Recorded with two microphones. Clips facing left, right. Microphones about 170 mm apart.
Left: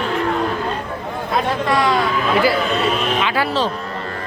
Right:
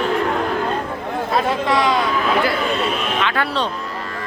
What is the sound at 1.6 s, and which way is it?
Speech, 20° right (ahead or behind).